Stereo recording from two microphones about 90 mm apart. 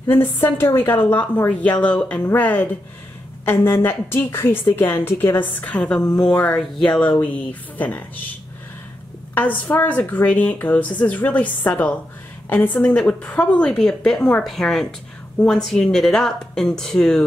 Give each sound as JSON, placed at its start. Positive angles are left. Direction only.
{"t": 0.0, "sound": "a woman's voice", "side_deg": 25}
{"t": 9.3, "sound": "a woman's voice", "side_deg": 20}